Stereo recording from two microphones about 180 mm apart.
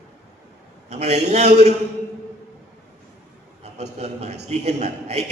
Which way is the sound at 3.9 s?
40° right (ahead or behind).